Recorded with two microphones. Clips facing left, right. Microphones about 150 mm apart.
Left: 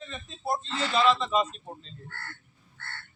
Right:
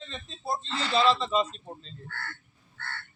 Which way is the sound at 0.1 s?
30° right (ahead or behind).